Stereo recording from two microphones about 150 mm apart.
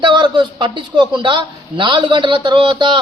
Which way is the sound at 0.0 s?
30° right (ahead or behind).